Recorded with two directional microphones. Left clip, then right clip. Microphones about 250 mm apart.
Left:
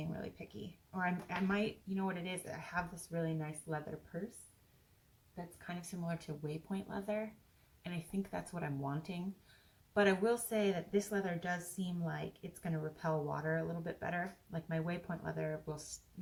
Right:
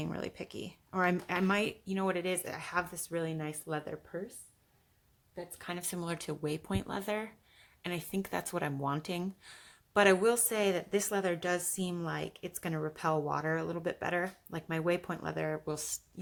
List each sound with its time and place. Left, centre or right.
0.0 s a woman's voice: right
5.6 s a woman's voice: right